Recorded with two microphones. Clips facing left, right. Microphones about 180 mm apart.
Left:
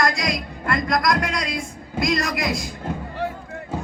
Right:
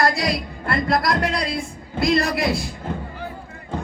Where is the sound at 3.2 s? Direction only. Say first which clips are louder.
Left 6 dB; 80° left.